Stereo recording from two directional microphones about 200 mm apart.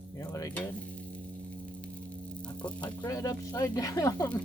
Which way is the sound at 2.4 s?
5° left (ahead or behind).